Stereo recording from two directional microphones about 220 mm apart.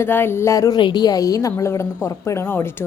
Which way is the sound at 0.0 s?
10° left (ahead or behind).